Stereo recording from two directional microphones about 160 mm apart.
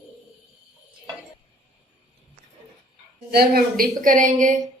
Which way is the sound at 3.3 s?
70° right (ahead or behind).